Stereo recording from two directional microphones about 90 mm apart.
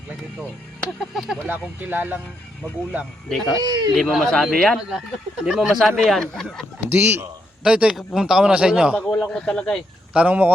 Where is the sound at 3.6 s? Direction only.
50° right (ahead or behind).